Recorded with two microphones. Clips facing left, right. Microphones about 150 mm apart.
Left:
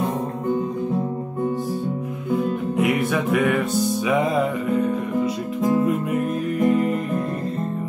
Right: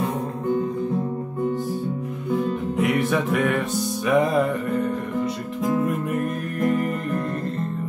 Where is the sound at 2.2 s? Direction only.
5° left (ahead or behind).